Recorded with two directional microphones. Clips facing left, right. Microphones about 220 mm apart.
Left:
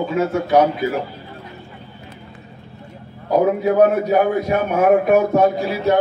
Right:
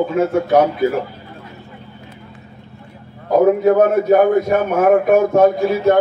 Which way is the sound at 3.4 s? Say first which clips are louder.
Right 3 dB; 45° right (ahead or behind).